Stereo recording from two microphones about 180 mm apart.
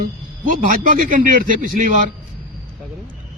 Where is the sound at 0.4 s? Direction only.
50° right (ahead or behind).